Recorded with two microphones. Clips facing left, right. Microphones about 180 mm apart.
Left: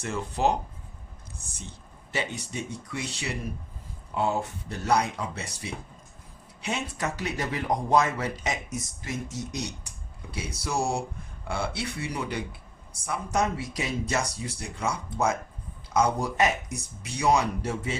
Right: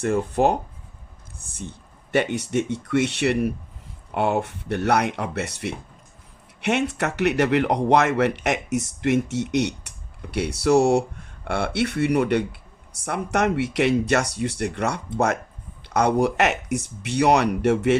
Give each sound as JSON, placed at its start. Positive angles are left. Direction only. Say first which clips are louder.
{"t": 0.0, "sound": "speech", "louder": "right 7 dB", "side_deg": -55}
{"t": 2.1, "sound": "speech", "louder": "right 11 dB", "side_deg": -70}